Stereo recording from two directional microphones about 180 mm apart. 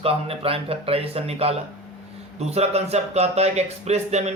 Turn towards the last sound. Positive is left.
turn(degrees=-35)  # may be behind; listen again after turning